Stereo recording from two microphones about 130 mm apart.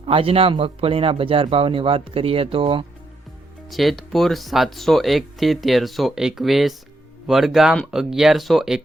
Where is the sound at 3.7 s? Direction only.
Centre (ahead or behind).